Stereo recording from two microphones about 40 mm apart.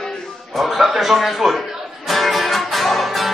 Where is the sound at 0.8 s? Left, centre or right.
Centre.